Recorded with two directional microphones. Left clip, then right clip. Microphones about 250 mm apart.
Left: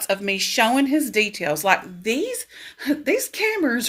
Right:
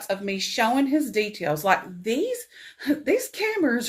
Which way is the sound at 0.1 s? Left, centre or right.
Left.